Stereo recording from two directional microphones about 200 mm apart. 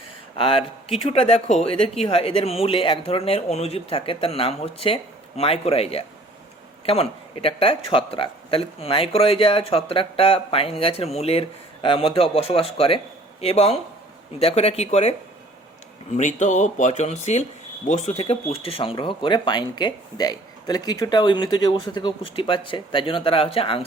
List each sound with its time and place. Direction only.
0.3 s speech: 25° left (ahead or behind)
16.1 s speech: 35° left (ahead or behind)